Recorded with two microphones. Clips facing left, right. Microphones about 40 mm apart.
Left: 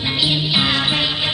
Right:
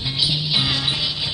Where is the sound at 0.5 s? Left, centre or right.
Left.